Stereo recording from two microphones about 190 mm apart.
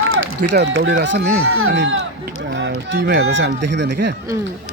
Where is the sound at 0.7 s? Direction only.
70° right (ahead or behind).